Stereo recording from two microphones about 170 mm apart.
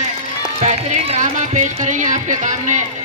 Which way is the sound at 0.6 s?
45° right (ahead or behind).